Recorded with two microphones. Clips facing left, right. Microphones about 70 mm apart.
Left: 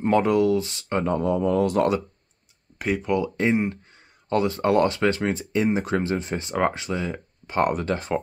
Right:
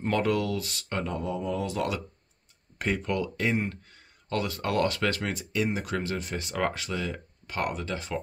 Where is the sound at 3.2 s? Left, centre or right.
Left.